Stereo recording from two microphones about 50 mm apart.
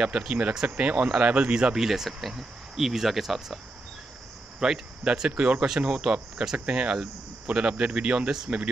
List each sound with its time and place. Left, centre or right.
0.3 s speech: centre
4.6 s speech: centre